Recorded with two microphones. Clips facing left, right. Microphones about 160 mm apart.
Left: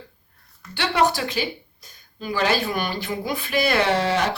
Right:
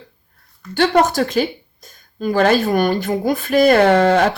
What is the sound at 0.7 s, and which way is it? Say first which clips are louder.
Speech: right 6 dB; 45° right (ahead or behind).